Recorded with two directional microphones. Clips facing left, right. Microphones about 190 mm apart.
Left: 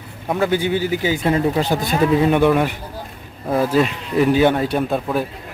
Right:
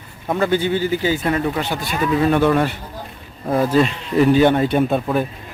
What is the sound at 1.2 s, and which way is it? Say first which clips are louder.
Speech: left 2 dB; 25° left (ahead or behind).